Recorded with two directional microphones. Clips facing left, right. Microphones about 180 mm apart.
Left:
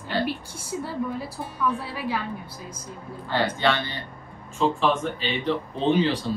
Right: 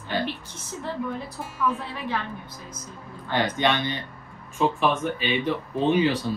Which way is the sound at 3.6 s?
15° right (ahead or behind).